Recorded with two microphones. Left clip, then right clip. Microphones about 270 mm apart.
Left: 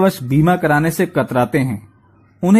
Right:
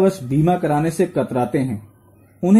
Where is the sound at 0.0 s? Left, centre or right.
Left.